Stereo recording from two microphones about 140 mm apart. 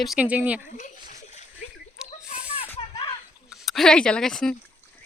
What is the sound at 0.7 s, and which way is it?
Splash, 65° left (ahead or behind).